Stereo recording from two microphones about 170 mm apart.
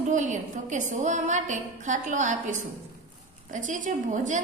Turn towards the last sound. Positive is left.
turn(degrees=-50)  # may be behind; listen again after turning